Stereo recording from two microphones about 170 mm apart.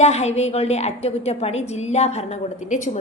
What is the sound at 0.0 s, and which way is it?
A woman's voice, 40° left (ahead or behind).